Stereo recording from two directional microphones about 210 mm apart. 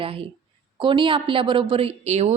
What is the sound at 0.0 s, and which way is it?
A woman's voice, 25° right (ahead or behind).